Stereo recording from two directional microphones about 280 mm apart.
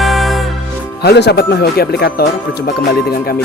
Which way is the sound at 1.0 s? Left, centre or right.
Left.